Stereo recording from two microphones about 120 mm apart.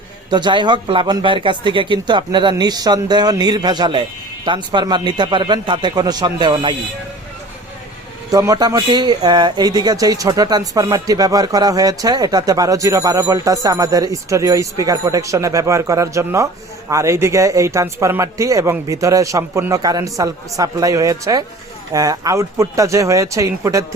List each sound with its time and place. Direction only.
0.3 s speech: 40° right (ahead or behind)
8.3 s speech: 30° right (ahead or behind)